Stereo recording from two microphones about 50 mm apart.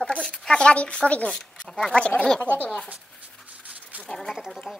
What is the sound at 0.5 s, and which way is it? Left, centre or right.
Speech, centre.